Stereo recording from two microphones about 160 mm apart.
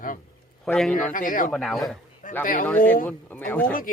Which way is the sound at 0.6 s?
5° left (ahead or behind).